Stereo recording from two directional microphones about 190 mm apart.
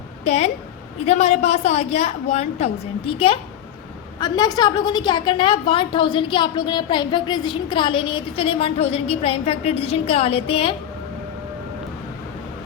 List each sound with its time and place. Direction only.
0.3 s a woman's voice: 35° left (ahead or behind)